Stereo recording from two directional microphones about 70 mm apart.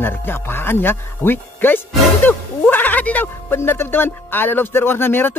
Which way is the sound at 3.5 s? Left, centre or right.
Left.